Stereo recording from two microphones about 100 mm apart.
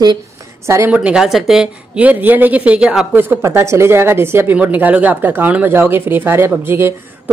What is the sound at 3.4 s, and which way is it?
Speech, 30° right (ahead or behind).